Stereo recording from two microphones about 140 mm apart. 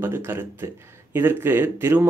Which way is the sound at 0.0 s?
15° right (ahead or behind).